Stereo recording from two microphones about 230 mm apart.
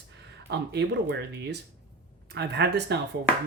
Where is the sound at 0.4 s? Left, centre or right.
Right.